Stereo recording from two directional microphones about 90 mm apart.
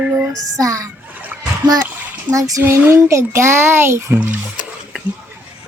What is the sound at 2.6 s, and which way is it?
A child's voice, 25° right (ahead or behind).